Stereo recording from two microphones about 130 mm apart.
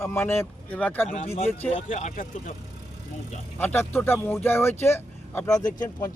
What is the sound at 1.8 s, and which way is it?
Speech, 70° left (ahead or behind).